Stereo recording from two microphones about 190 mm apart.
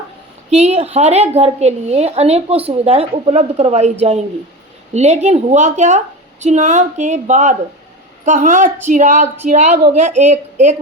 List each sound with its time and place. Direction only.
0.5 s a woman's voice: 35° right (ahead or behind)
4.9 s a woman's voice: 35° right (ahead or behind)